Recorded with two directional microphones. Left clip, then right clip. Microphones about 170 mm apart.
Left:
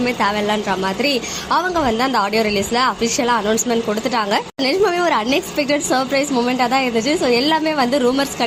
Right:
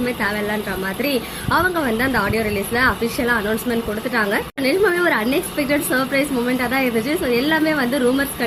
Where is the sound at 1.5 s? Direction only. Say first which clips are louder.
Left 1 dB; 15° left (ahead or behind).